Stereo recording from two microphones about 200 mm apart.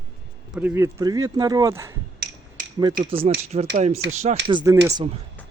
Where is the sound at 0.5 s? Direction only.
10° right (ahead or behind).